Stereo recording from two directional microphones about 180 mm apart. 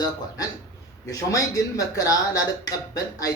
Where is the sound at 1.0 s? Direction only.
20° left (ahead or behind).